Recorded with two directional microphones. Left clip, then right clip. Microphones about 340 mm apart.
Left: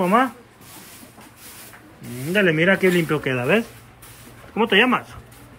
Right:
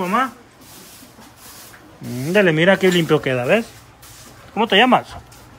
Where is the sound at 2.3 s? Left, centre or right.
Centre.